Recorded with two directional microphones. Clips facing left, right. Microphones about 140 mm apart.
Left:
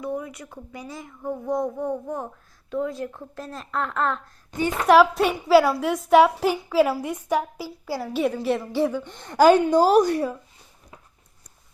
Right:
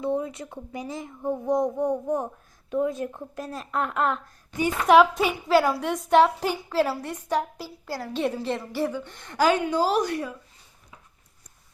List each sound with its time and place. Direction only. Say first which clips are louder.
0.0 s speech: right 3 dB; 25° right (ahead or behind)
4.9 s speech: left 1 dB; centre (ahead or behind)
9.1 s a woman's voice: left 7 dB; 35° left (ahead or behind)